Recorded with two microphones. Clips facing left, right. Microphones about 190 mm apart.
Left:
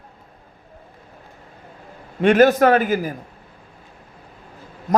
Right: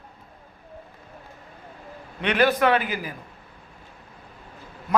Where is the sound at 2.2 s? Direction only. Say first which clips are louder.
Left 7 dB; 45° left (ahead or behind).